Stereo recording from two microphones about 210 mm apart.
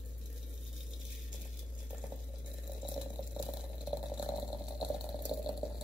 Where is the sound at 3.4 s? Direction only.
5° right (ahead or behind).